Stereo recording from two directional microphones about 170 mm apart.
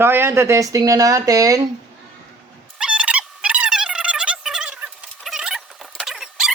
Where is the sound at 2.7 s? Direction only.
5° right (ahead or behind).